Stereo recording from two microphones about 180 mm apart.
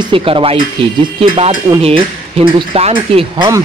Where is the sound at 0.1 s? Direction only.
30° right (ahead or behind).